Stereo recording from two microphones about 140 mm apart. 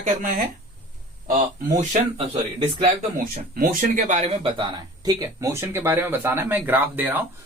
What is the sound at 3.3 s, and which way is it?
Speech, 90° right.